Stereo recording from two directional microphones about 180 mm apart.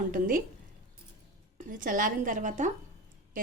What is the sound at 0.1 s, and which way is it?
Speech, 50° right (ahead or behind).